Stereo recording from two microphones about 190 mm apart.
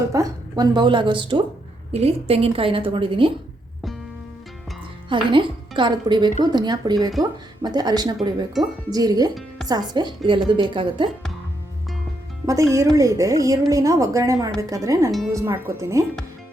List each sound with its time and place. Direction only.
0.1 s a woman's voice: 20° right (ahead or behind)
5.0 s a woman's voice: 25° right (ahead or behind)
12.7 s a woman's voice: 15° right (ahead or behind)